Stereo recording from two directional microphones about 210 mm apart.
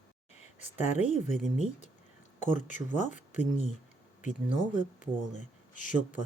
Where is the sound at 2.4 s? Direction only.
35° left (ahead or behind).